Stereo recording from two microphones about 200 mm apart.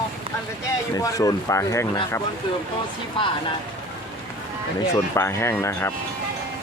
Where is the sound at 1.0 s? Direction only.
15° left (ahead or behind).